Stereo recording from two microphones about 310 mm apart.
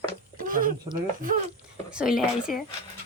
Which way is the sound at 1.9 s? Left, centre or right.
Centre.